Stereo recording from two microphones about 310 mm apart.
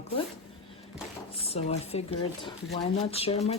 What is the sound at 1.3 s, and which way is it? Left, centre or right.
Speech, centre.